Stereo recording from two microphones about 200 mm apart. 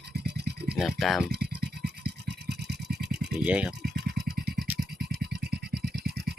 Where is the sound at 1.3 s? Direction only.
55° right (ahead or behind).